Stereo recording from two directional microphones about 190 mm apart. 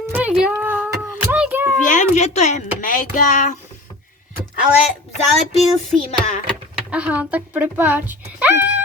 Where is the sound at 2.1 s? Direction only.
35° left (ahead or behind).